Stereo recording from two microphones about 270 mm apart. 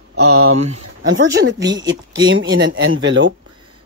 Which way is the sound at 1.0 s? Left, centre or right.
Right.